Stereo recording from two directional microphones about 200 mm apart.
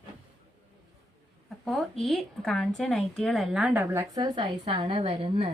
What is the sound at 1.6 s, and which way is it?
Speech, centre (ahead or behind).